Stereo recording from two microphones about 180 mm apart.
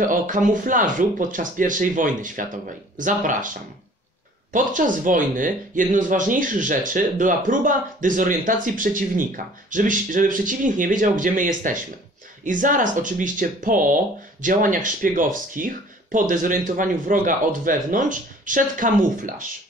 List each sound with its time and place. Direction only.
0.0 s speech: 45° right (ahead or behind)